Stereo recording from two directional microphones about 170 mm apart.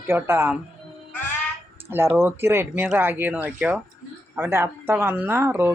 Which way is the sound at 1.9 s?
15° right (ahead or behind).